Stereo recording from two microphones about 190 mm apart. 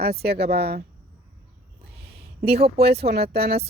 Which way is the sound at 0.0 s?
55° right (ahead or behind).